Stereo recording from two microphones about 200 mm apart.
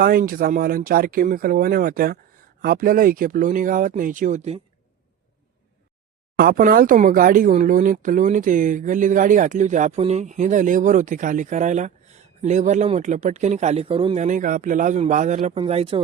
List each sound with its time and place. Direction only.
0.0 s speech: 45° right (ahead or behind)
6.3 s speech: 45° right (ahead or behind); by 16.0 s 30° right (ahead or behind)